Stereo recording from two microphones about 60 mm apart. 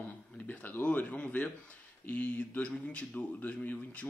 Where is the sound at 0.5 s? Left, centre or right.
Left.